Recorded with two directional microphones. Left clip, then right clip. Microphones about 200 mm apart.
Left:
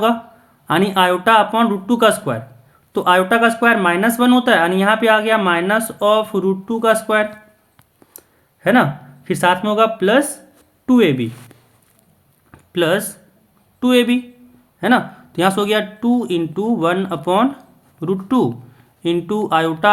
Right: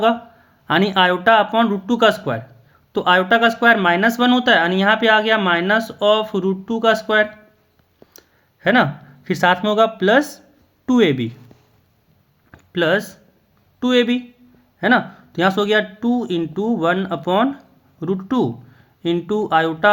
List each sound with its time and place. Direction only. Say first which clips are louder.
0.7 s speech: left 1 dB; 15° right (ahead or behind)
8.6 s speech: left 1 dB; 20° right (ahead or behind)
12.5 s a sound: left 1 dB; 15° right (ahead or behind)
13.7 s speech: left 2 dB; 15° right (ahead or behind)